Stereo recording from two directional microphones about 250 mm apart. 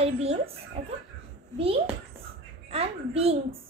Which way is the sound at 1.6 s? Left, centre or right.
Right.